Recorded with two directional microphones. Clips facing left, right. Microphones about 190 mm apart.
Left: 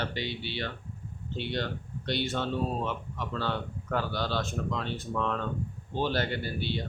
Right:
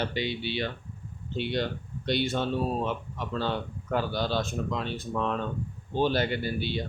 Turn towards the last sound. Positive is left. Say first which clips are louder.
# right 3 dB
turn(degrees=-15)  # may be behind; listen again after turning